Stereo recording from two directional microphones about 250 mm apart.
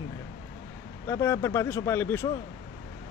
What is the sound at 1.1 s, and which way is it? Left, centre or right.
Speech, centre.